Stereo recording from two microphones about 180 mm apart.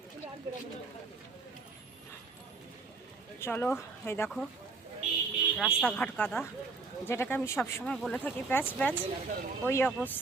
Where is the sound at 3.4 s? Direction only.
10° left (ahead or behind).